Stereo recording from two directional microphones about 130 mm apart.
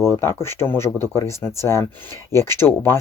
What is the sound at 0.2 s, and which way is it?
Speech, 20° left (ahead or behind).